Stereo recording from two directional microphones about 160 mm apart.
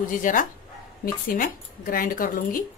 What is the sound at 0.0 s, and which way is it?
Speech, 55° left (ahead or behind).